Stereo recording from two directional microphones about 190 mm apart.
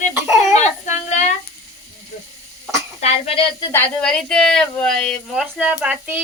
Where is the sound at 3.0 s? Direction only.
30° left (ahead or behind).